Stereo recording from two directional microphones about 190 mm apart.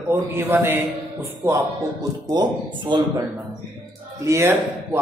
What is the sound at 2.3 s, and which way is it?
Speech, 25° right (ahead or behind).